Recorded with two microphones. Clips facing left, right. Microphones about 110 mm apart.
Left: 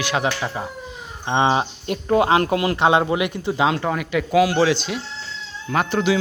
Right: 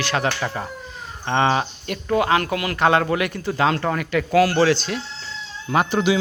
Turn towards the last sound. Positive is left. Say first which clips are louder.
# right 1 dB
turn(degrees=-5)  # may be behind; listen again after turning